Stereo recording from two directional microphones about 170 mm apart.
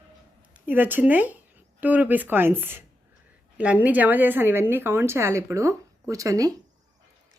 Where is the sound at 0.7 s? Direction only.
10° right (ahead or behind).